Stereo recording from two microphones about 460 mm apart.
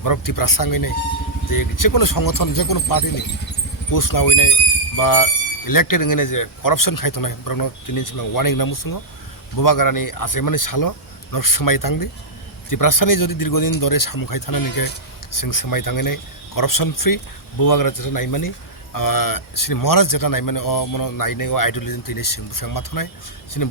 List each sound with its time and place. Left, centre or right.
0.0 s speech: left